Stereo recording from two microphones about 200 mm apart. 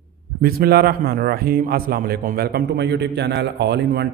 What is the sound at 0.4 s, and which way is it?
A man's voice, 50° right (ahead or behind).